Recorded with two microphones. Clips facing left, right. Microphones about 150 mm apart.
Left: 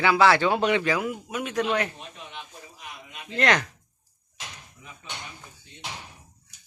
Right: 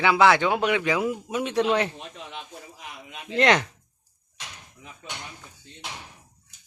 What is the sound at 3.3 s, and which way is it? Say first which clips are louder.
Speech: right 3 dB; 25° right (ahead or behind).